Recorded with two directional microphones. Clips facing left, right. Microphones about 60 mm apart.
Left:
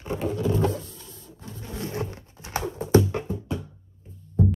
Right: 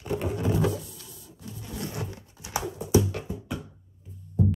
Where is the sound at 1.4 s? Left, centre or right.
Left.